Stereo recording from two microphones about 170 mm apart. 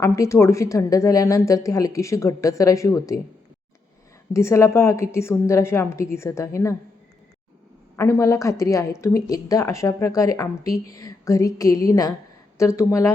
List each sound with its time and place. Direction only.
0.0 s speech: 20° left (ahead or behind)
4.3 s a woman's voice: 15° left (ahead or behind)
7.9 s a woman's voice: 15° left (ahead or behind)